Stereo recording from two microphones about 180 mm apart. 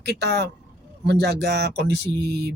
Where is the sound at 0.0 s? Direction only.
65° right (ahead or behind).